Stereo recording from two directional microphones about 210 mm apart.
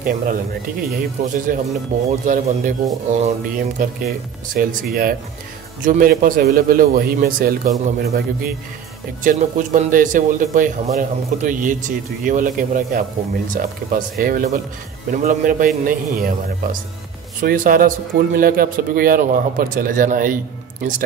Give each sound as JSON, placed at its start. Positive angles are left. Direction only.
{"t": 0.0, "sound": "a man's voice", "side_deg": -45}
{"t": 17.4, "sound": "a man's voice", "side_deg": -40}